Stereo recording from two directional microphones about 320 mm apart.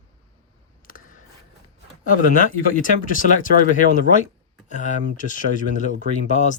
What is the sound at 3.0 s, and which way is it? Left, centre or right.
Speech, left.